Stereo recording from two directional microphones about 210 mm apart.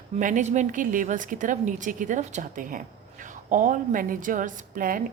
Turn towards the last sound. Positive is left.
turn(degrees=-40)  # may be behind; listen again after turning